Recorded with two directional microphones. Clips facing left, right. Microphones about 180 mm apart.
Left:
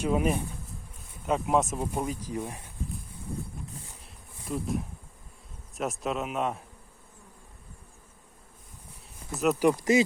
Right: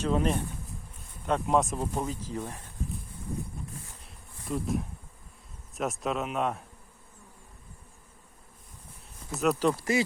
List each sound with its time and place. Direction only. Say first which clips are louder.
0.0 s speech: left 1 dB; 10° left (ahead or behind)
4.4 s speech: right 1 dB; centre (ahead or behind)
9.3 s speech: left 1 dB; centre (ahead or behind)
9.6 s speech: left 4 dB; 15° left (ahead or behind)